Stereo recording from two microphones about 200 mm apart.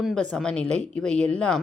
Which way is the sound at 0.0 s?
5° left (ahead or behind).